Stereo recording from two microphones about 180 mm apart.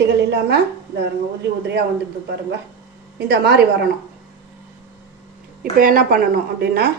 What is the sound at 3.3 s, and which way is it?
Speech, 65° right (ahead or behind).